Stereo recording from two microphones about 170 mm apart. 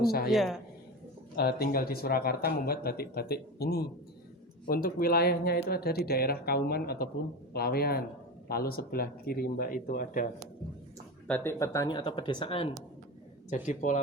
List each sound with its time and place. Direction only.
0.0 s speech: 65° left (ahead or behind)
0.3 s speech: centre (ahead or behind)
1.4 s speech: 70° left (ahead or behind)
11.3 s speech: 10° left (ahead or behind); by 12.6 s 30° left (ahead or behind)
13.5 s speech: 45° left (ahead or behind)